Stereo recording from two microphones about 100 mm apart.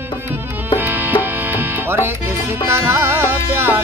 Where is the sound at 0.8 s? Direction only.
20° right (ahead or behind).